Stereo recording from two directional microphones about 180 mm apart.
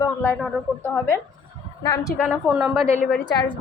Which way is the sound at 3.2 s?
25° left (ahead or behind).